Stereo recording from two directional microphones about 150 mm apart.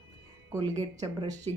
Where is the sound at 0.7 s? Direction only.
50° right (ahead or behind).